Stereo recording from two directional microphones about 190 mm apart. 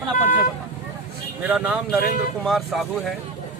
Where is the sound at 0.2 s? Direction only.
45° left (ahead or behind).